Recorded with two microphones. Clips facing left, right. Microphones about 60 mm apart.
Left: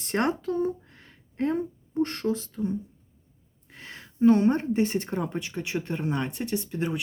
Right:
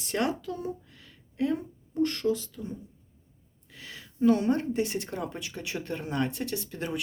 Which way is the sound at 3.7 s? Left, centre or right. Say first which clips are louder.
Left 2 dB; left.